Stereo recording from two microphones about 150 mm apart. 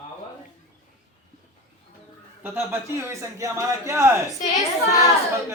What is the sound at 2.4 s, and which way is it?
Speech, 15° right (ahead or behind).